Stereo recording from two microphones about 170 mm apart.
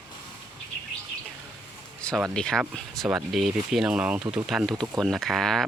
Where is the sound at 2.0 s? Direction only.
5° left (ahead or behind).